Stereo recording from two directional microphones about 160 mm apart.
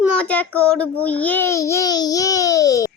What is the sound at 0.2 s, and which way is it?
A child's voice, 5° left (ahead or behind).